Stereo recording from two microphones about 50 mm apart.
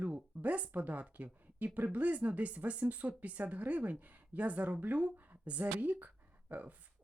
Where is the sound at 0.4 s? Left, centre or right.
Right.